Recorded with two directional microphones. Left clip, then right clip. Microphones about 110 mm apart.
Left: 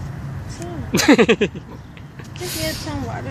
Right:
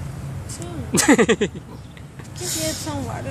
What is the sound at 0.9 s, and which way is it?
Speech, centre (ahead or behind).